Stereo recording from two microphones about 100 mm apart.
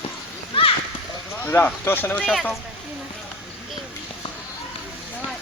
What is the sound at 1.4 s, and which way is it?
Speech, 20° left (ahead or behind).